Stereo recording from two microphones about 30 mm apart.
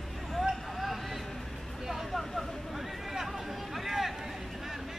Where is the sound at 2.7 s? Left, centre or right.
Centre.